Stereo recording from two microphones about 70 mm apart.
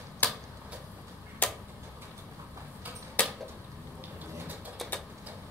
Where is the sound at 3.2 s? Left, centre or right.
Left.